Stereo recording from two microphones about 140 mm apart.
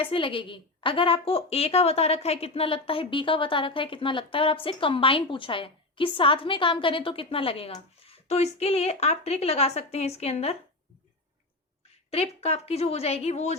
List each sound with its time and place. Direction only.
0.0 s a woman's voice: 40° left (ahead or behind)
12.1 s a woman's voice: 50° left (ahead or behind)